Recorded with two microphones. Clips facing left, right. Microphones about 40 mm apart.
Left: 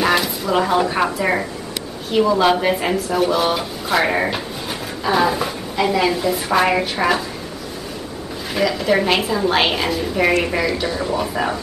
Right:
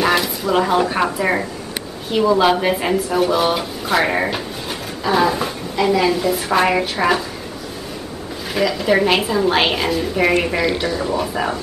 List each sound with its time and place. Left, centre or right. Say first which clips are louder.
0.0 s a sound: right 1 dB; centre
1.2 s a woman's voice: even; centre
8.5 s a woman's voice: right 1 dB; centre
10.5 s speech: right 1 dB; right
10.9 s a woman's voice: right 1 dB; centre